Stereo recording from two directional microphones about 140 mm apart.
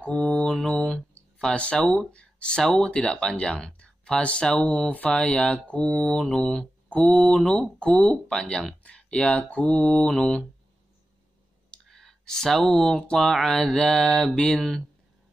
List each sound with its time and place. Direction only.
0.0 s speech: 10° left (ahead or behind)
11.7 s speech: 5° left (ahead or behind)